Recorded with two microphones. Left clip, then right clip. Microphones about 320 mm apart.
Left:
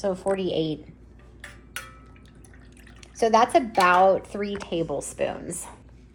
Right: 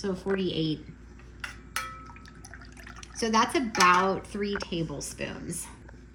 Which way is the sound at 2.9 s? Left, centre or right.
Centre.